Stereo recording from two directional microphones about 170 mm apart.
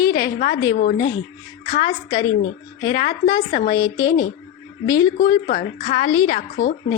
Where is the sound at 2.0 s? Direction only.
25° left (ahead or behind).